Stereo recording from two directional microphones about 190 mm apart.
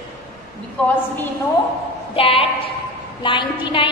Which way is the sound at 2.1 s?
30° left (ahead or behind).